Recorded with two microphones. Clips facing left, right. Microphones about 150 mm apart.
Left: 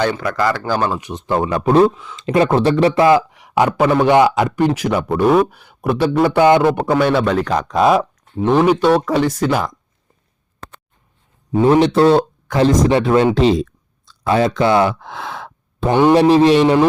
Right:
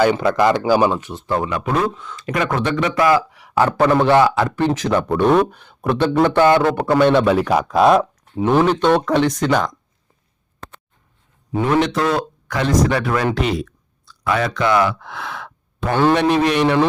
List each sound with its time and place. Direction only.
0.2 s speech: 20° right (ahead or behind)
0.9 s a man's voice: 15° left (ahead or behind)
1.5 s speech: 35° left (ahead or behind); by 3.7 s 20° left (ahead or behind)
3.7 s a man's voice: 10° left (ahead or behind)
6.9 s speech: 5° left (ahead or behind)
7.3 s speech: 5° right (ahead or behind)
8.6 s speech: 10° left (ahead or behind)
11.5 s a man's voice: 30° left (ahead or behind)